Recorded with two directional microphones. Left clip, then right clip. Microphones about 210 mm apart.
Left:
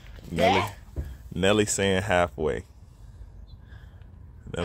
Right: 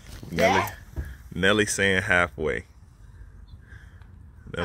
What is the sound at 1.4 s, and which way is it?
Speech, 10° left (ahead or behind).